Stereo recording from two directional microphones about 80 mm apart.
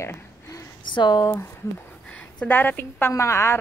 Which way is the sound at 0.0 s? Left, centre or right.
Left.